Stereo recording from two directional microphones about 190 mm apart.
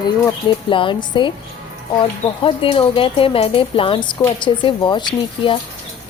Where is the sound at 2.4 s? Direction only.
30° left (ahead or behind).